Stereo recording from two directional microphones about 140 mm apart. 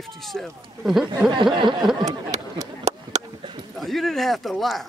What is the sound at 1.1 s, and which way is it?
Speech, 30° right (ahead or behind).